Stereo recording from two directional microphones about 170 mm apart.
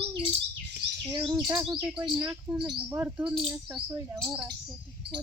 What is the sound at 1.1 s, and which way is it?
Bird, 25° right (ahead or behind).